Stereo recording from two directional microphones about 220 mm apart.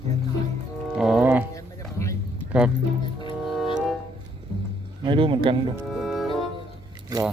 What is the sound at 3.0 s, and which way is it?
Music, 20° left (ahead or behind).